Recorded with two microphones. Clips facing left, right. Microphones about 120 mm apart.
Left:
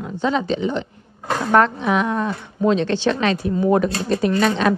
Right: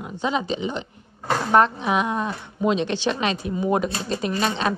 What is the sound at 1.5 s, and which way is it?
A woman's voice, 20° right (ahead or behind).